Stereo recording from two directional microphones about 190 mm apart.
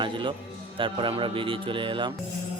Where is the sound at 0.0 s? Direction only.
25° right (ahead or behind).